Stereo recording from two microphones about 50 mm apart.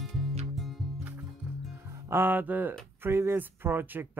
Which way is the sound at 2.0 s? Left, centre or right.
Right.